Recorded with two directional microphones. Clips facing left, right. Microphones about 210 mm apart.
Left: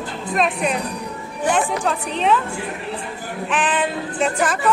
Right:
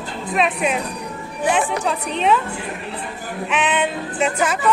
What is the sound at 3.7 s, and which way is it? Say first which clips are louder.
Music: right 1 dB; 5° right (ahead or behind).